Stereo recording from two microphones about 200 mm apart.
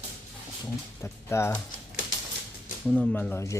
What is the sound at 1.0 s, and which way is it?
Speech, 15° left (ahead or behind).